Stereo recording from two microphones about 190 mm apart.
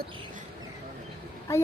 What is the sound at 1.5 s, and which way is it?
Speech, 15° left (ahead or behind).